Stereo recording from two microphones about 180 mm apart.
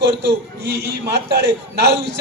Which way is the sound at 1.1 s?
65° right (ahead or behind).